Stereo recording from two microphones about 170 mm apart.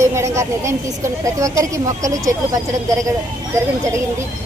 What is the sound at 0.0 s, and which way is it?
A woman's voice, 15° right (ahead or behind).